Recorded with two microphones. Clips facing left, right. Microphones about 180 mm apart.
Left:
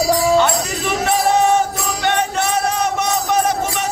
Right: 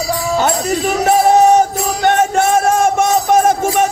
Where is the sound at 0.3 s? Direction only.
40° right (ahead or behind).